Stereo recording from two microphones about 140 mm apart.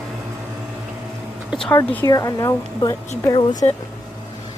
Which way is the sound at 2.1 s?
25° left (ahead or behind).